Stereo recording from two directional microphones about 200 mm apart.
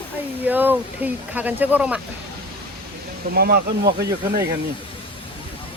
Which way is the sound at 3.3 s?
50° right (ahead or behind).